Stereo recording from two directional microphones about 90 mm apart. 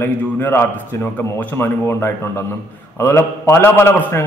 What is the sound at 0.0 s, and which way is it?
A man's voice, 25° left (ahead or behind).